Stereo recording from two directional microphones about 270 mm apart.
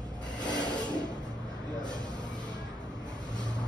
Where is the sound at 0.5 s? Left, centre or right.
Centre.